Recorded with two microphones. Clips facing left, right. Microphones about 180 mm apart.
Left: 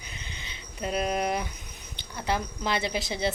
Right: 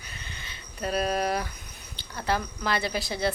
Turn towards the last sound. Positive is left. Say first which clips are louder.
# right 1 dB
turn(degrees=20)  # may be behind; listen again after turning